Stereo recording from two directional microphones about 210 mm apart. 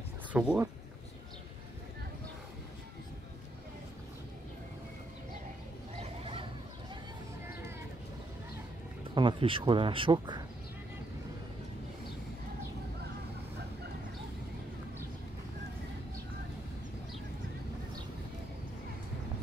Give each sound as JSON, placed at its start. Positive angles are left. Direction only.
{"t": 0.3, "sound": "speech", "side_deg": -5}
{"t": 5.9, "sound": "a sound", "side_deg": -25}
{"t": 9.1, "sound": "speech", "side_deg": -25}